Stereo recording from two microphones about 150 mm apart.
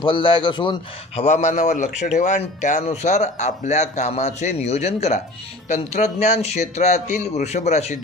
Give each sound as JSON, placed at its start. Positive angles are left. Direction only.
{"t": 0.0, "sound": "a man's voice", "side_deg": 35}
{"t": 1.2, "sound": "speech", "side_deg": 50}